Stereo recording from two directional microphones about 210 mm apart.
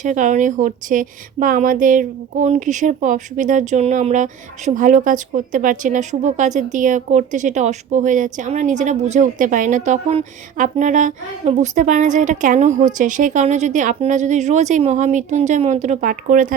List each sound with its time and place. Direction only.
0.0 s a woman's voice: 35° right (ahead or behind)